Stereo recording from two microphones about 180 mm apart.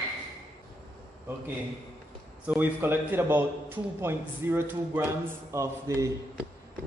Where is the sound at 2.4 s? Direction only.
10° right (ahead or behind).